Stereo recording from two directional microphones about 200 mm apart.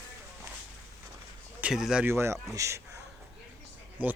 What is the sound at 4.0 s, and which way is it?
Speech, 10° right (ahead or behind).